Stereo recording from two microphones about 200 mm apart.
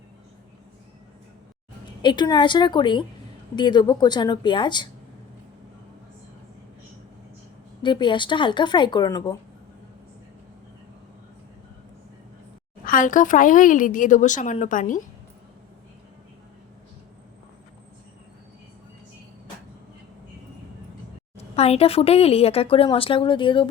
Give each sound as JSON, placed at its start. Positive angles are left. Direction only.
{"t": 2.0, "sound": "speech", "side_deg": 20}
{"t": 7.8, "sound": "speech", "side_deg": 25}
{"t": 12.8, "sound": "speech", "side_deg": 40}
{"t": 21.3, "sound": "speech", "side_deg": 30}